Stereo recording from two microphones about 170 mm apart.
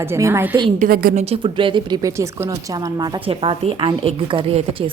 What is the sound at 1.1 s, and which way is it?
A woman's voice, 35° right (ahead or behind).